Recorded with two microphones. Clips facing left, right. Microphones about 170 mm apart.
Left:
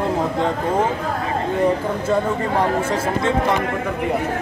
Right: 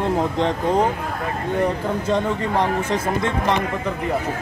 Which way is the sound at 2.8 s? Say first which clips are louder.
Left 1 dB; 10° left (ahead or behind).